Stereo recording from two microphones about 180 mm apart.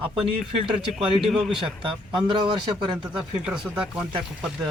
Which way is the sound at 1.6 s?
25° right (ahead or behind).